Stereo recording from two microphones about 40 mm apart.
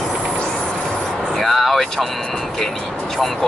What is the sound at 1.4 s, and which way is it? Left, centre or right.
Vehicle, centre.